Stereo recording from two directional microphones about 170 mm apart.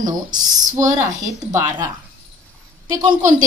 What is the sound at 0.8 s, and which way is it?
Speech, 20° right (ahead or behind).